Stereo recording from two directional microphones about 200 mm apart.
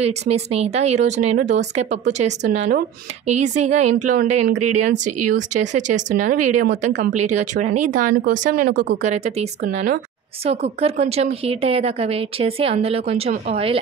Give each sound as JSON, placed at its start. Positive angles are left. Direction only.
{"t": 0.0, "sound": "a woman's voice", "side_deg": -30}